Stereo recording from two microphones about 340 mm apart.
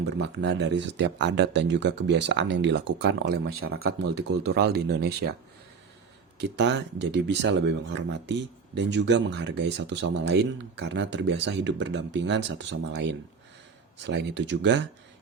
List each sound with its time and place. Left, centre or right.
0.0 s speech: right
6.4 s speech: right